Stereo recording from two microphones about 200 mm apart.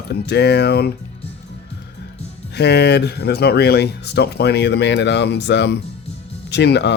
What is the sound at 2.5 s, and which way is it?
Speech, 55° left (ahead or behind).